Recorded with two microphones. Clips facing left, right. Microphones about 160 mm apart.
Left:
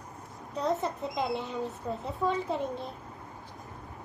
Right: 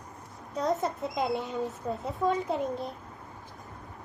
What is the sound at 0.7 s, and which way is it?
A child's voice, centre (ahead or behind).